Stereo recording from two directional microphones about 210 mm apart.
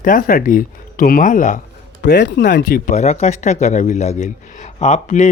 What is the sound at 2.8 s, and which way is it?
A man's voice, 35° left (ahead or behind).